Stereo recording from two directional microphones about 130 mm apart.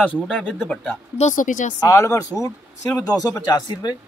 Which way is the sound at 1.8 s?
25° left (ahead or behind).